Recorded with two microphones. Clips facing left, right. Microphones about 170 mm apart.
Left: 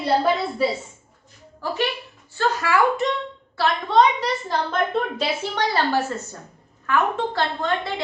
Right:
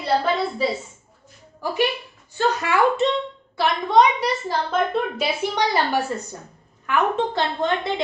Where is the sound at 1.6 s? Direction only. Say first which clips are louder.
Right 2 dB; 15° right (ahead or behind).